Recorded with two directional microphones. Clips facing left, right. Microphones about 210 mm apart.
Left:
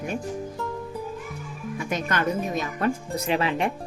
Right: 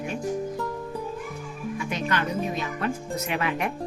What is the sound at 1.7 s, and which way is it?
Speech, 45° left (ahead or behind).